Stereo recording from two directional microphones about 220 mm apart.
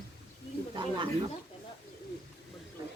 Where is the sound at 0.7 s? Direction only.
20° right (ahead or behind).